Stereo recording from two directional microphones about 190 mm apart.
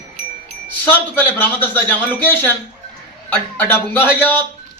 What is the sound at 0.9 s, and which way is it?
A man's voice, 10° left (ahead or behind).